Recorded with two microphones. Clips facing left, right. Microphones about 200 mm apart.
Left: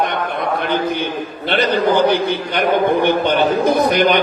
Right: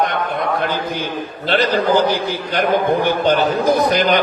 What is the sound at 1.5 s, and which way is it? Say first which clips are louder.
A man's voice: even; 60° left (ahead or behind).